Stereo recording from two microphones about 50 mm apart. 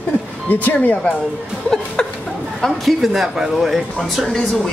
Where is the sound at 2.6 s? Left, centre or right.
Centre.